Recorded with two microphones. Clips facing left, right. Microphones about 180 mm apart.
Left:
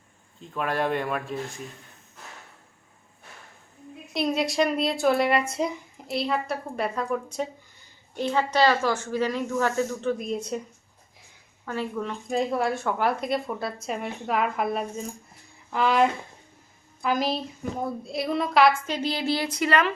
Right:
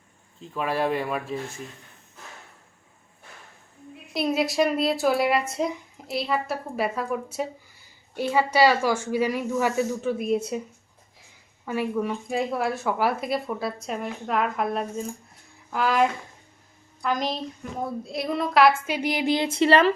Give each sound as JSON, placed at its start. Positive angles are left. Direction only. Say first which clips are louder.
{"t": 0.3, "sound": "speech", "louder": "right 1 dB", "side_deg": 0}
{"t": 4.1, "sound": "speech", "louder": "right 1 dB", "side_deg": 0}
{"t": 11.6, "sound": "speech", "louder": "right 4 dB", "side_deg": -10}
{"t": 18.9, "sound": "speech", "louder": "right 2 dB", "side_deg": -15}